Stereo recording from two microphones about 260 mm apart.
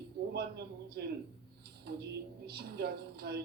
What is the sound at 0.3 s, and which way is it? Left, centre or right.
Speech, right.